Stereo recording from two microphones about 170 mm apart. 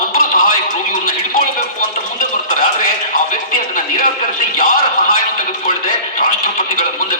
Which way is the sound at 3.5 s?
55° left (ahead or behind).